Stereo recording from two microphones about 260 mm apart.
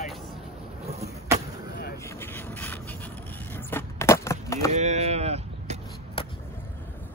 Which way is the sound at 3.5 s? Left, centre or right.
Centre.